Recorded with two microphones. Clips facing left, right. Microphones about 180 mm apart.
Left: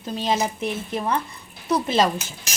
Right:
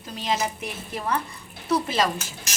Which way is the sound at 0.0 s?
30° left (ahead or behind).